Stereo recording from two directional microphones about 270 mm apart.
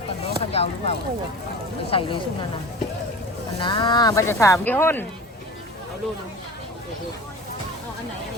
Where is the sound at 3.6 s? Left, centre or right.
Centre.